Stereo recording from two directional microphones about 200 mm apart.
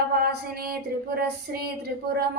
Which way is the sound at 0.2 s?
50° right (ahead or behind).